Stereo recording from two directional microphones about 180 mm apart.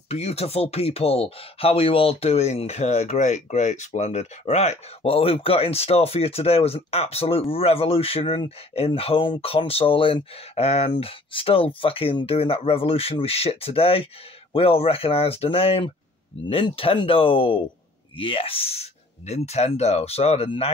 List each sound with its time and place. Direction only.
0.1 s speech: 35° left (ahead or behind)